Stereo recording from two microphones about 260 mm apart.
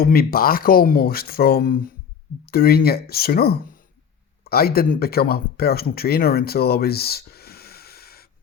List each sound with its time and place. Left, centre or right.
0.0 s speech: left